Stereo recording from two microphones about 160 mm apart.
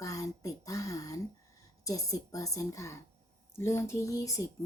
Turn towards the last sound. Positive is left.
turn(degrees=20)  # may be behind; listen again after turning